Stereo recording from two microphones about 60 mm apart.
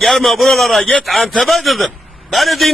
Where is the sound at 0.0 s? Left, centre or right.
Centre.